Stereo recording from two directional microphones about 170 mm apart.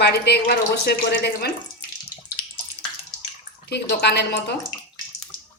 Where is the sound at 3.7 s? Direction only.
75° left (ahead or behind).